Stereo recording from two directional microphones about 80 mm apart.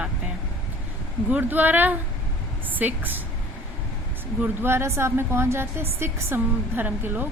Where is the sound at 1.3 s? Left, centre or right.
Right.